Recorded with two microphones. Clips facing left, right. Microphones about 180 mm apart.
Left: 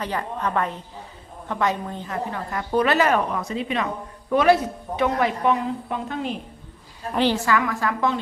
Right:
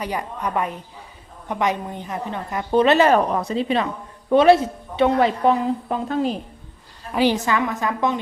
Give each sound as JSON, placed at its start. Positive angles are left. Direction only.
{"t": 0.0, "sound": "a woman's voice", "side_deg": -10}
{"t": 7.1, "sound": "a woman's voice", "side_deg": -10}